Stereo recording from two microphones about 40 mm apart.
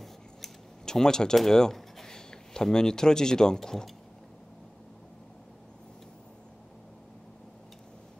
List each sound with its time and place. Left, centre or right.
0.0 s scissors: centre
1.5 s speech: centre